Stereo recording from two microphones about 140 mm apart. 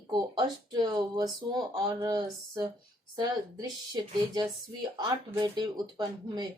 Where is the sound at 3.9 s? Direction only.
30° right (ahead or behind).